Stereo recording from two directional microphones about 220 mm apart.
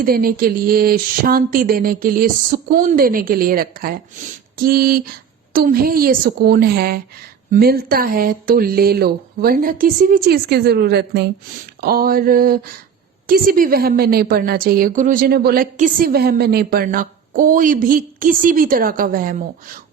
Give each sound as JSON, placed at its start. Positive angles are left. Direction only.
{"t": 0.0, "sound": "a woman's voice", "side_deg": -40}